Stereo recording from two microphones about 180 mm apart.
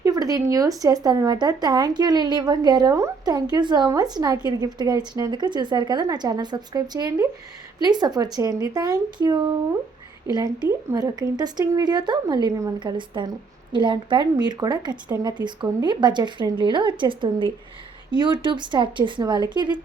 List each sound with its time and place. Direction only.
0.0 s speech: 20° right (ahead or behind)